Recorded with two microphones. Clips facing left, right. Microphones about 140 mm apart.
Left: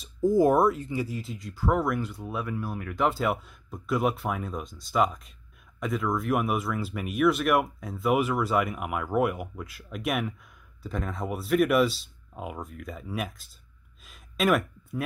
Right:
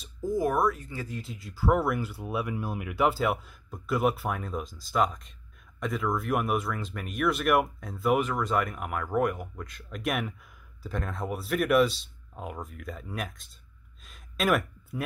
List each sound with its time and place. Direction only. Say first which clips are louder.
0.2 s speech: left 5 dB; 25° left (ahead or behind)
1.0 s speech: left 3 dB; centre (ahead or behind)